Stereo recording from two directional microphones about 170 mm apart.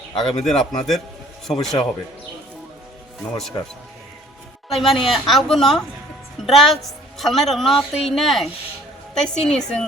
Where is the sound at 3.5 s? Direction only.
20° left (ahead or behind).